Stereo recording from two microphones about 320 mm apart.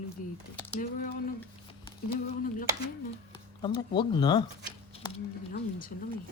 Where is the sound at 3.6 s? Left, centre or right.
Centre.